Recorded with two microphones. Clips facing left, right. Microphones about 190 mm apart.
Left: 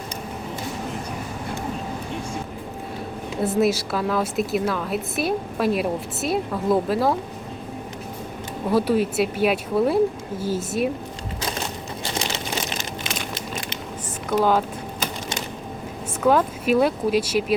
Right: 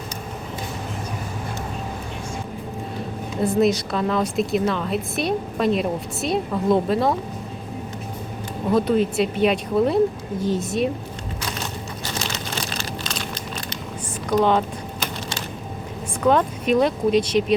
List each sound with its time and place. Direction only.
3.4 s a woman's voice: 5° left (ahead or behind)
8.7 s a woman's voice: 5° left (ahead or behind)
12.2 s a sound: 15° left (ahead or behind)
16.2 s a woman's voice: 5° left (ahead or behind)